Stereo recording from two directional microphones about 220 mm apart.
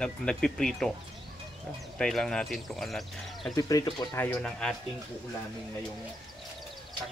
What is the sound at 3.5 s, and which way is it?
Speech, 15° left (ahead or behind).